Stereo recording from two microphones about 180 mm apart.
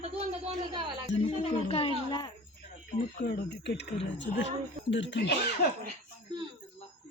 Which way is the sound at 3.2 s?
65° left (ahead or behind).